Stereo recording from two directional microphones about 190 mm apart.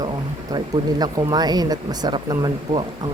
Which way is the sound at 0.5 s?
20° right (ahead or behind).